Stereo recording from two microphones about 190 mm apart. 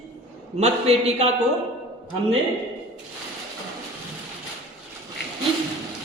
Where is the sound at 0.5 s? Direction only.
35° right (ahead or behind).